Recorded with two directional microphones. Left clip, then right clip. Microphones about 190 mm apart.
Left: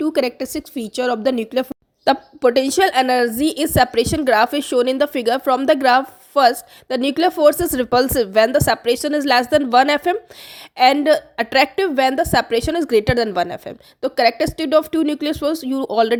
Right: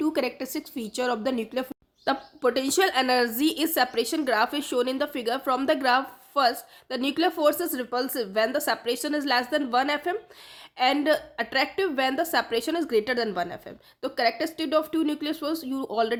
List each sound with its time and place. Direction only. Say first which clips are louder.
0.0 s speech: left 8 dB; 30° left (ahead or behind)